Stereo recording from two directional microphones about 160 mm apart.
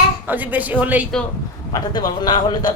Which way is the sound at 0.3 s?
10° right (ahead or behind).